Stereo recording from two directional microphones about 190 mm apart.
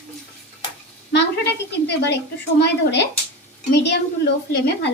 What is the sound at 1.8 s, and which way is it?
A woman's voice, 60° left (ahead or behind).